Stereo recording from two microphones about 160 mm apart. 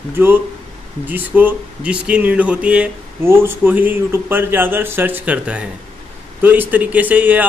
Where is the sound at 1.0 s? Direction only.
10° right (ahead or behind).